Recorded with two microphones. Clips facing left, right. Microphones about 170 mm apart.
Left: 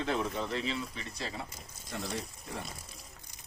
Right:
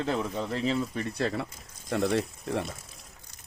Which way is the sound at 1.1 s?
60° right (ahead or behind).